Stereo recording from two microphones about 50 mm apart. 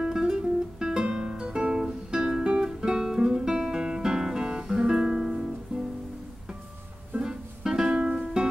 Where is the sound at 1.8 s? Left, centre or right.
Centre.